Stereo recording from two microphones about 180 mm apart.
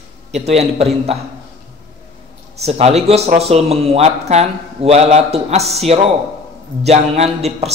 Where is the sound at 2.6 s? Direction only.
35° right (ahead or behind).